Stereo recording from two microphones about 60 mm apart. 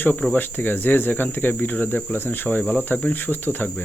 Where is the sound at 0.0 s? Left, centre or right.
Left.